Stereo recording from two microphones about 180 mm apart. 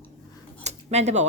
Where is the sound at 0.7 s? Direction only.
40° right (ahead or behind).